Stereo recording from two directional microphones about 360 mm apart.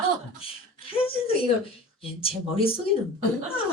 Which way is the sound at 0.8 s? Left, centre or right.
Centre.